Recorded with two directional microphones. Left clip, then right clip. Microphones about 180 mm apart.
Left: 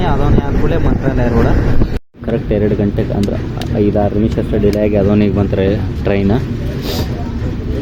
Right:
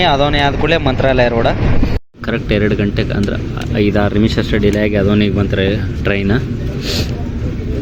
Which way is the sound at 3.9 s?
20° right (ahead or behind).